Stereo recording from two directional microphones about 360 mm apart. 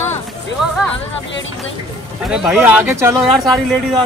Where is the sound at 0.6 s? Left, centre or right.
Centre.